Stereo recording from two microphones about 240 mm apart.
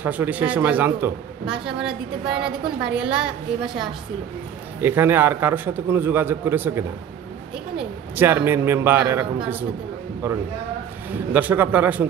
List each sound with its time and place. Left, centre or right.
0.0 s a man's voice: centre
2.3 s a woman's voice: right
2.8 s a woman's voice: centre
4.7 s a man's voice: centre
11.1 s a man's voice: centre